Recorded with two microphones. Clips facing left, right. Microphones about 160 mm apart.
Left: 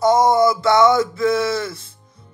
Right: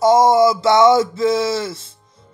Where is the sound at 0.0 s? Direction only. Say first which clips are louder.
Right 2 dB; 20° right (ahead or behind).